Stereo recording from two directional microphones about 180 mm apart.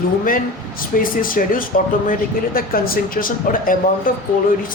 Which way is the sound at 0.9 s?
50° left (ahead or behind).